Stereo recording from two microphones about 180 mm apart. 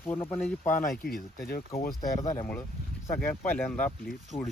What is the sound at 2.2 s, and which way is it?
Speech, 20° left (ahead or behind).